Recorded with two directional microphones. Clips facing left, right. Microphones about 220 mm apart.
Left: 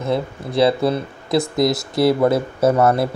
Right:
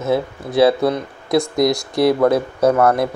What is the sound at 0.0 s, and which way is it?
Speech, centre (ahead or behind).